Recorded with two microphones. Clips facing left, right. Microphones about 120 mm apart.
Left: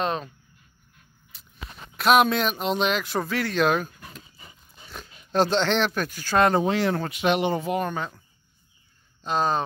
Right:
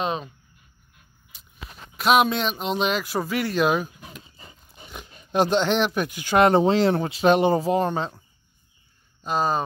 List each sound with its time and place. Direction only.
0.0 s speech: 5° right (ahead or behind)
1.3 s a sound: centre (ahead or behind)
2.0 s speech: centre (ahead or behind); by 4.3 s 15° right (ahead or behind)
4.7 s dog: 15° right (ahead or behind)
5.3 s speech: 15° right (ahead or behind); by 8.2 s 30° right (ahead or behind)
9.2 s speech: 5° right (ahead or behind)